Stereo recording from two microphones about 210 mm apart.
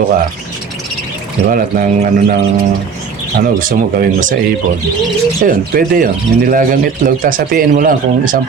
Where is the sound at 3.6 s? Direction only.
40° right (ahead or behind).